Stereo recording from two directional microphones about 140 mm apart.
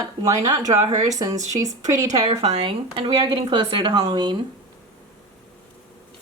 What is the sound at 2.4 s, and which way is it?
A woman's voice, 45° right (ahead or behind).